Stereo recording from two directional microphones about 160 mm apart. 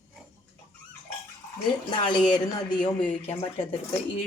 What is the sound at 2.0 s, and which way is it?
Speech, 30° left (ahead or behind).